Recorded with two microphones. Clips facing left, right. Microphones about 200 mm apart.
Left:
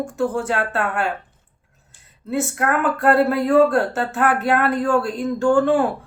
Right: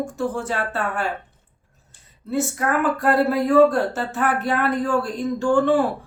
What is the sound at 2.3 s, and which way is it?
Speech, centre (ahead or behind).